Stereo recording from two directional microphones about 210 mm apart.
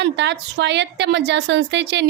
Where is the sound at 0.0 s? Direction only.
55° right (ahead or behind).